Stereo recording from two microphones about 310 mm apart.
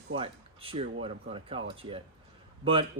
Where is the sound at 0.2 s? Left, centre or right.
Centre.